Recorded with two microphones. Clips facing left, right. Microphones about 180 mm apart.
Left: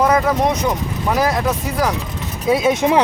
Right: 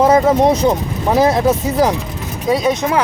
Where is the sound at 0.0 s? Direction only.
25° right (ahead or behind).